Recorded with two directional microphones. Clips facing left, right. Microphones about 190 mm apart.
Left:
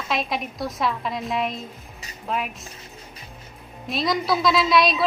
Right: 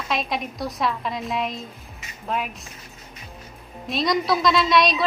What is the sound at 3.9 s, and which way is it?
A woman's voice, centre (ahead or behind).